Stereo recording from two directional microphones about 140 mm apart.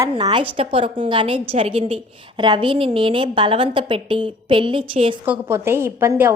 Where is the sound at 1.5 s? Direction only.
45° right (ahead or behind).